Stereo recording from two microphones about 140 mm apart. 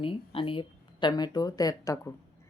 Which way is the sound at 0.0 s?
40° left (ahead or behind).